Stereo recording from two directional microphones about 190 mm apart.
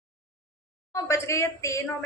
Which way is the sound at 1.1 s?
15° left (ahead or behind).